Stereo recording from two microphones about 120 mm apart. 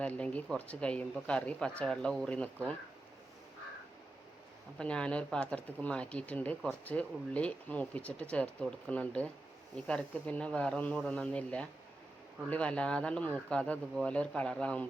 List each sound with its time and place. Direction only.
0.0 s speech: 10° left (ahead or behind)
4.8 s speech: 10° left (ahead or behind)